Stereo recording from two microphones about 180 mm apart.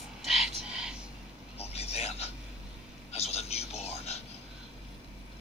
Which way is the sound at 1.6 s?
35° left (ahead or behind).